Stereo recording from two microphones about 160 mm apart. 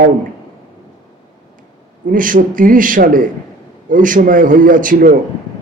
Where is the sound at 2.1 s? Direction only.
55° right (ahead or behind).